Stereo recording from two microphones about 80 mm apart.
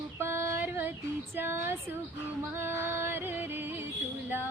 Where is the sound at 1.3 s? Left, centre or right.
Right.